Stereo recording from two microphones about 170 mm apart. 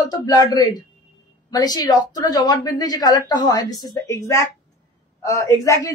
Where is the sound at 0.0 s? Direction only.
25° left (ahead or behind).